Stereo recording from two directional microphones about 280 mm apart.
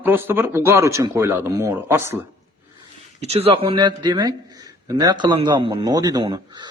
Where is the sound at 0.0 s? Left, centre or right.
Centre.